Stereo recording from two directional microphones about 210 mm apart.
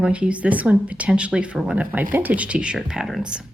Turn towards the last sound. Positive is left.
turn(degrees=-5)  # may be behind; listen again after turning